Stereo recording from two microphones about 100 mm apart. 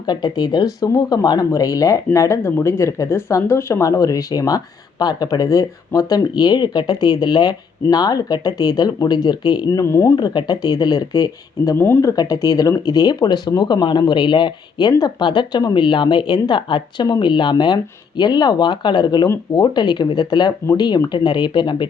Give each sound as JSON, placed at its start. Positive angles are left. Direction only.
{"t": 0.0, "sound": "speech", "side_deg": 45}
{"t": 9.8, "sound": "speech", "side_deg": 30}
{"t": 10.2, "sound": "speech", "side_deg": 45}
{"t": 11.8, "sound": "speech", "side_deg": 25}
{"t": 12.1, "sound": "speech", "side_deg": 40}